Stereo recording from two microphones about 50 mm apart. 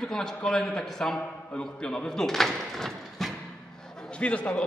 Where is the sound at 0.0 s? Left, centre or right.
Centre.